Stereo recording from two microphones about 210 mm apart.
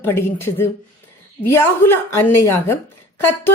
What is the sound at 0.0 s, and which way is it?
Speech, 10° left (ahead or behind).